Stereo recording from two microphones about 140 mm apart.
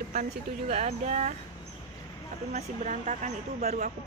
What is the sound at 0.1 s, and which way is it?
A woman's voice, 60° right (ahead or behind).